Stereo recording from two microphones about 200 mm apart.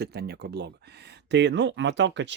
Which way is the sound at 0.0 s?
55° right (ahead or behind).